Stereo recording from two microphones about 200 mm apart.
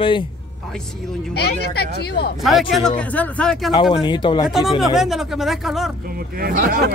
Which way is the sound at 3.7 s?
20° left (ahead or behind).